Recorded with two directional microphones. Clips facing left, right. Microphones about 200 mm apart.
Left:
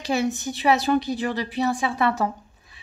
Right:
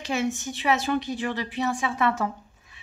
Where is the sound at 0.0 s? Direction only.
35° left (ahead or behind).